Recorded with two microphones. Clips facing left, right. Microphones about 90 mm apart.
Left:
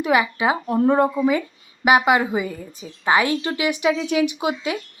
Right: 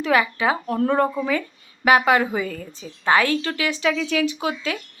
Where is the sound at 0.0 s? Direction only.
15° left (ahead or behind).